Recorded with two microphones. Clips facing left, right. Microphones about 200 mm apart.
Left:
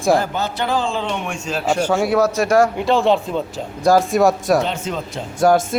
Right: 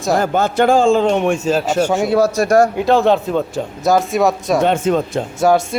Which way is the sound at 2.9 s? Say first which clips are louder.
Right 4 dB; 45° right (ahead or behind).